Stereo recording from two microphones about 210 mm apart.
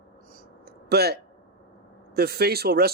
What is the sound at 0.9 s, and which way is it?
Speech, 50° right (ahead or behind).